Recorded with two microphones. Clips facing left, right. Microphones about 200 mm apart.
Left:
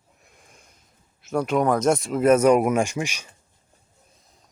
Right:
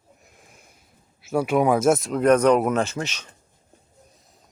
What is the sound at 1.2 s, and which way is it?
Speech, 10° right (ahead or behind).